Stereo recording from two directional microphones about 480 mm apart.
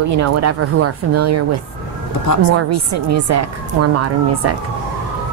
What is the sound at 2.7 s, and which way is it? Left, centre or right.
Speech, right.